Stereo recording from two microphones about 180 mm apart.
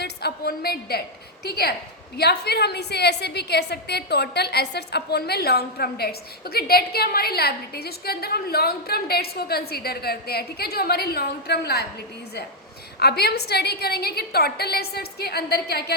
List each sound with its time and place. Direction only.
0.0 s a woman's voice: 65° left (ahead or behind)
13.0 s a woman's voice: 65° left (ahead or behind)